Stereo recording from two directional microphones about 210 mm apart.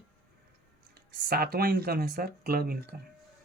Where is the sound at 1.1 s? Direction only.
45° right (ahead or behind).